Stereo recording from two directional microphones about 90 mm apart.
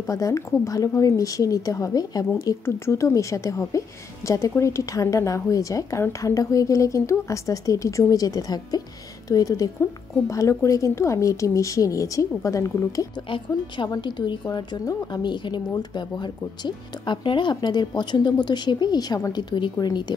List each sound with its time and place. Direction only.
0.0 s a woman's voice: 40° left (ahead or behind)
2.3 s a woman's voice: 30° left (ahead or behind)
13.8 s a woman's voice: 50° left (ahead or behind)